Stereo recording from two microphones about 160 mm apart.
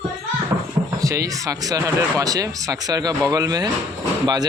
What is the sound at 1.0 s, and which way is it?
Speech, 20° right (ahead or behind).